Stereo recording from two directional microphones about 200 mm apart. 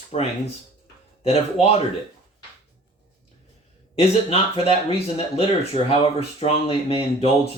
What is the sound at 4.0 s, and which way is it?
Speech, 25° left (ahead or behind).